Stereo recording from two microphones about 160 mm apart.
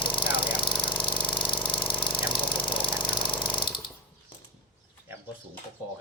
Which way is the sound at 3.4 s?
30° left (ahead or behind).